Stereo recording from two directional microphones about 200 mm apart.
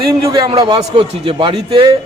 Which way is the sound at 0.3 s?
25° right (ahead or behind).